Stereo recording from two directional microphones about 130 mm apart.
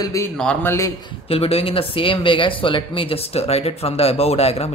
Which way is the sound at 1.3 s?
50° left (ahead or behind).